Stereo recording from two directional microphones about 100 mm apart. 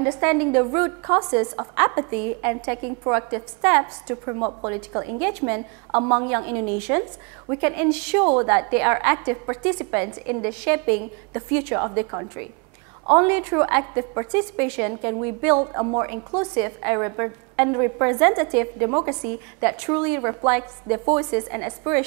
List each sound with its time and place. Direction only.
0.0 s a woman's voice: 20° right (ahead or behind)